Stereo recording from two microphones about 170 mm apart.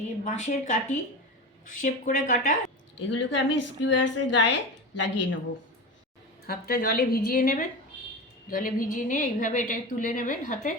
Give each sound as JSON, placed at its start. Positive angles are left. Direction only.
{"t": 0.3, "sound": "a woman's voice", "side_deg": 45}
{"t": 3.0, "sound": "a woman's voice", "side_deg": 90}
{"t": 6.4, "sound": "a woman's voice", "side_deg": 60}